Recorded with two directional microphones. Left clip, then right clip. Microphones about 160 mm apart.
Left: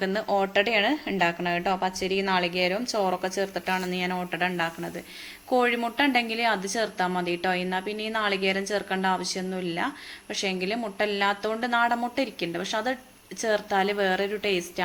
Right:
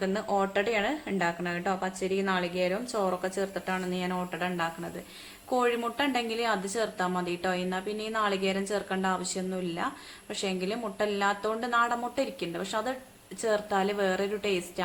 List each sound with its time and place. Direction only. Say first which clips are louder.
0.0 s a woman's voice: left 3 dB; 15° left (ahead or behind)